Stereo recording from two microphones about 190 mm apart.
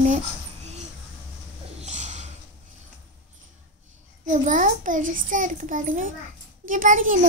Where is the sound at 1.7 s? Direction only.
35° right (ahead or behind).